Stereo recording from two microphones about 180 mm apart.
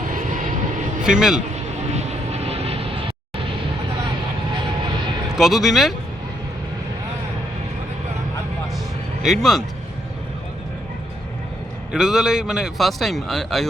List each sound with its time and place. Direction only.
0.1 s vehicle: 45° right (ahead or behind)
1.0 s a man's voice: 5° right (ahead or behind)
1.9 s vehicle: 35° right (ahead or behind)
4.5 s vehicle: 25° right (ahead or behind)
5.4 s a man's voice: centre (ahead or behind)
9.2 s a man's voice: centre (ahead or behind)
11.9 s a man's voice: 5° right (ahead or behind)